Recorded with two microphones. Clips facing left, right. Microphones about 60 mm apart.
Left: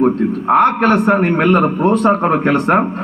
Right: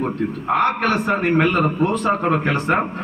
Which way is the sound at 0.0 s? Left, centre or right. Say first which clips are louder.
Left 8 dB; left.